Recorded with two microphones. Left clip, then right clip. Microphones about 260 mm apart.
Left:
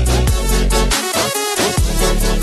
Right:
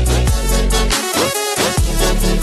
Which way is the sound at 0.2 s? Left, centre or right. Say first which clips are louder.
Even; centre.